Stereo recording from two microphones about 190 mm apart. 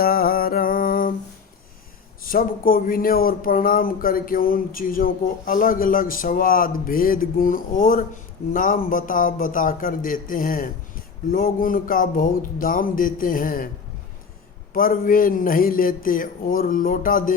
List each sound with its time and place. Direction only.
0.0 s music: 50° left (ahead or behind)
2.2 s speech: 50° left (ahead or behind)
14.7 s speech: 45° left (ahead or behind)